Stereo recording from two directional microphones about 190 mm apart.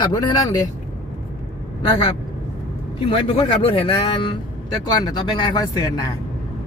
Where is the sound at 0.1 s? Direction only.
20° left (ahead or behind).